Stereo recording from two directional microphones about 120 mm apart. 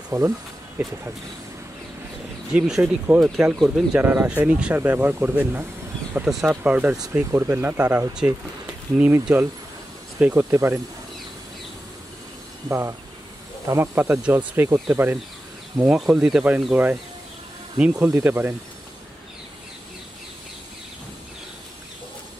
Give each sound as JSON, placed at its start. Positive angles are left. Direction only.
{"t": 0.1, "sound": "speech", "side_deg": -30}
{"t": 2.5, "sound": "speech", "side_deg": -5}
{"t": 4.0, "sound": "speech", "side_deg": -15}
{"t": 12.6, "sound": "speech", "side_deg": -15}
{"t": 15.8, "sound": "speech", "side_deg": -5}